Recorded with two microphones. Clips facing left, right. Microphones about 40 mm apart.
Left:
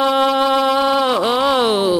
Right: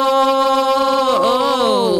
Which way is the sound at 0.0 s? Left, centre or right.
Centre.